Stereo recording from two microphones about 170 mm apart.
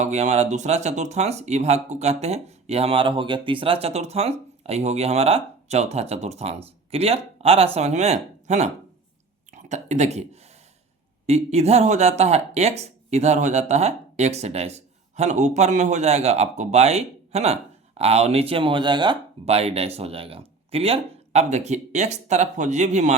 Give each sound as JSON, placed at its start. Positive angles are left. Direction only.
{"t": 0.0, "sound": "speech", "side_deg": -40}
{"t": 11.3, "sound": "speech", "side_deg": -40}